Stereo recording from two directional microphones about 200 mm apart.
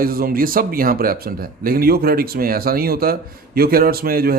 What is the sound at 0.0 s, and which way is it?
Speech, 45° right (ahead or behind).